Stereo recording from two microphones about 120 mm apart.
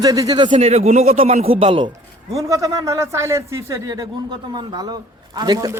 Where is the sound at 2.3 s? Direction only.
25° right (ahead or behind).